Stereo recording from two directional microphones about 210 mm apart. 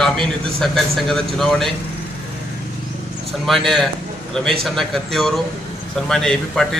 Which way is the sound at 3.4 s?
Centre (ahead or behind).